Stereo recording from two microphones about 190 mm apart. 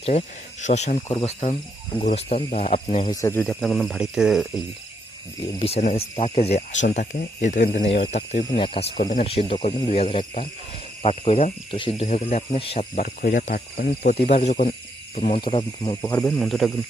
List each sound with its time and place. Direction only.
0.0 s cricket: 35° left (ahead or behind)
3.1 s speech: 15° left (ahead or behind); by 4.4 s centre (ahead or behind)
5.5 s cricket: 30° left (ahead or behind)
8.4 s speech: 25° left (ahead or behind)
9.2 s cricket: 30° left (ahead or behind)
12.5 s speech: 30° left (ahead or behind)
13.0 s cricket: 45° left (ahead or behind)
15.1 s speech: 35° left (ahead or behind)
16.0 s speech: 15° left (ahead or behind)